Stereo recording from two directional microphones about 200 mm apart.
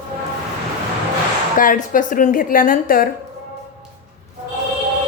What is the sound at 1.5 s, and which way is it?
A woman's voice, 45° left (ahead or behind).